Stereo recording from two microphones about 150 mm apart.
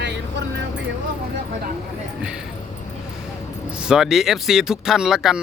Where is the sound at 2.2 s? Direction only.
5° right (ahead or behind).